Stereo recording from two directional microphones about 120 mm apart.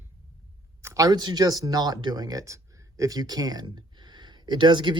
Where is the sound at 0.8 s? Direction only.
25° right (ahead or behind).